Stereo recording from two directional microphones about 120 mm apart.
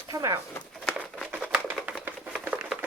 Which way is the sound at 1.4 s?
5° left (ahead or behind).